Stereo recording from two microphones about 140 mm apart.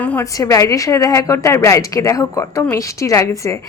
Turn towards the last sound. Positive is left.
turn(degrees=20)  # may be behind; listen again after turning